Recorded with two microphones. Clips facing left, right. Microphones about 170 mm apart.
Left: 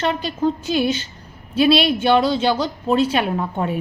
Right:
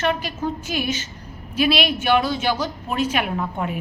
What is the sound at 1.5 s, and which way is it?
A woman's voice, 30° left (ahead or behind).